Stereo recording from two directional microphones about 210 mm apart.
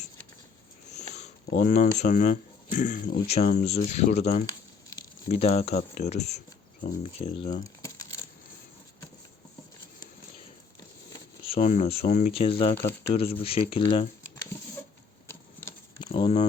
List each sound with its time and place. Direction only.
1.1 s speech: 35° left (ahead or behind)
11.4 s speech: 30° left (ahead or behind)
16.0 s a sound: 30° left (ahead or behind)